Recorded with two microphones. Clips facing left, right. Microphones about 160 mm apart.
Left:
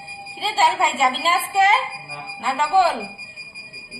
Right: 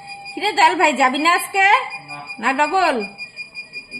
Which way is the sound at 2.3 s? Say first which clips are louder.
Even; 80° right.